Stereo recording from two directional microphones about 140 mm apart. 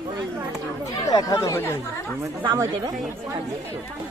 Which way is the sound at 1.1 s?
25° left (ahead or behind).